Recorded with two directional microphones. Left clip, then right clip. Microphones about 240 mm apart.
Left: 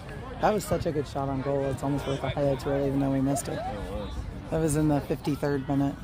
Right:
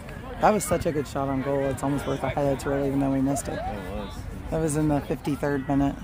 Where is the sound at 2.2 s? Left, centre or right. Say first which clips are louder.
Right 2 dB; centre.